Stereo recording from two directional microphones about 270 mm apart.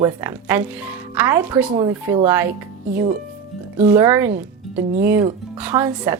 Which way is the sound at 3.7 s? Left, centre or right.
Centre.